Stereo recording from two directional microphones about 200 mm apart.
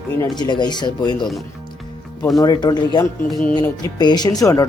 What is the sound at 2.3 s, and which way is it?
Speech, 20° left (ahead or behind).